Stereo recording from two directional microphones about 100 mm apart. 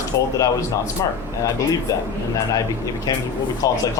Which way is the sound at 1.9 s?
35° left (ahead or behind).